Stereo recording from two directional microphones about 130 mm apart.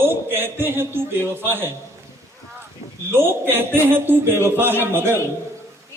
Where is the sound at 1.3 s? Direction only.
20° right (ahead or behind).